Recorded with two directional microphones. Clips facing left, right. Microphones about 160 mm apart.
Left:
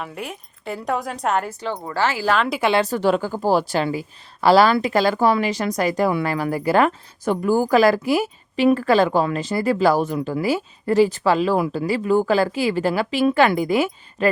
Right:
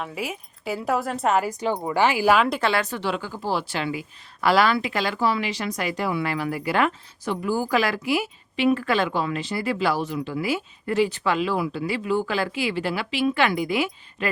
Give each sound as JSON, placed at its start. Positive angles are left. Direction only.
{"t": 0.0, "sound": "a woman's voice", "side_deg": 0}
{"t": 1.5, "sound": "speech", "side_deg": -15}
{"t": 2.8, "sound": "a woman's voice", "side_deg": 40}